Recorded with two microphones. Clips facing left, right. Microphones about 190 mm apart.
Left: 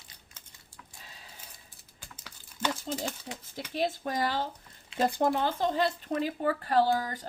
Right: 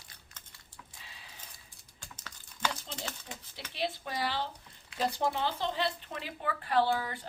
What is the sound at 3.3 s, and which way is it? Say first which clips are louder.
A woman's voice: left 8 dB; 55° left (ahead or behind).